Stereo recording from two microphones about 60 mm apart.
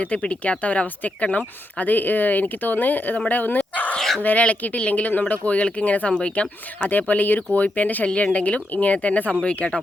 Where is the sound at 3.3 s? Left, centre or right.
Left.